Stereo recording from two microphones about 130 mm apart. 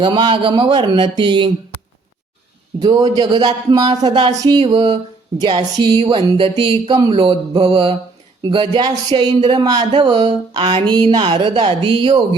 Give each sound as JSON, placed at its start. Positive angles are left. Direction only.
{"t": 0.0, "sound": "speech", "side_deg": -35}
{"t": 2.8, "sound": "speech", "side_deg": -30}